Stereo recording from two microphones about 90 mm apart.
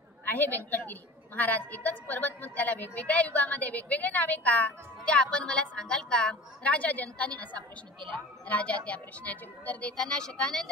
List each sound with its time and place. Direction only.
0.2 s a woman's voice: 20° left (ahead or behind)